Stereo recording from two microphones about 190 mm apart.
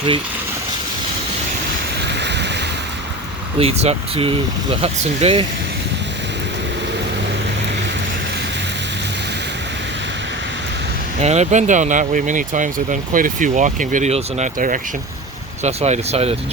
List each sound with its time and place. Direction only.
2.0 s a sound: 65° right (ahead or behind)
3.6 s speech: 35° right (ahead or behind)
11.2 s speech: 35° right (ahead or behind)